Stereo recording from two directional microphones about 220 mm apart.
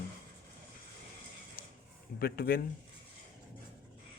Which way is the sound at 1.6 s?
40° left (ahead or behind).